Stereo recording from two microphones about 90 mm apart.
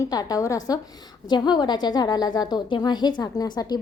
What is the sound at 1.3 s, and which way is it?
A woman's voice, 55° left (ahead or behind).